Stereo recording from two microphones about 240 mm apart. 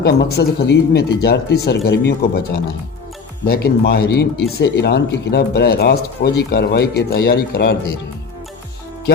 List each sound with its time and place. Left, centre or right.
0.0 s speech: left